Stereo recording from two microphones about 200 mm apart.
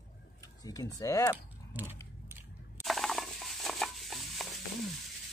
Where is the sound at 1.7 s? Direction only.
10° right (ahead or behind).